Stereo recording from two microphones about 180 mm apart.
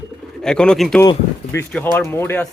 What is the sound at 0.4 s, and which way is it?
Speech, 5° left (ahead or behind).